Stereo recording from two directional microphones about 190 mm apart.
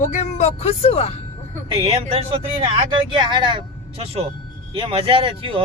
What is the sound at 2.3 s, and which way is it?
Speech, 30° right (ahead or behind).